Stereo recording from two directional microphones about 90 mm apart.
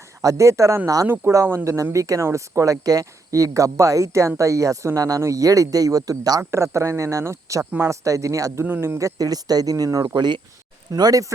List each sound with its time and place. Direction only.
0.2 s speech: 35° right (ahead or behind)
1.0 s speech: 20° right (ahead or behind)
1.3 s speech: 30° right (ahead or behind)
6.5 s speech: 30° right (ahead or behind)
8.6 s speech: 25° right (ahead or behind); by 10.1 s 40° right (ahead or behind)
10.2 s speech: 55° right (ahead or behind)
10.9 s speech: 45° right (ahead or behind)